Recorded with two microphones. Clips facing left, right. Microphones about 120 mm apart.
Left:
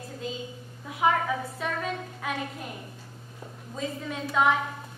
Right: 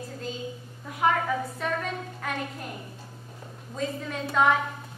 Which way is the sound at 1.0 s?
5° left (ahead or behind).